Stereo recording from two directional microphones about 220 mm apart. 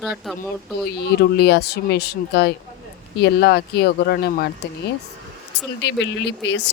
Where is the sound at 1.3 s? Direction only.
50° left (ahead or behind).